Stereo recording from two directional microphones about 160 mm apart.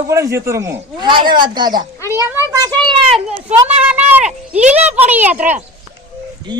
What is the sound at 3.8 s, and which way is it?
Speech, 10° right (ahead or behind).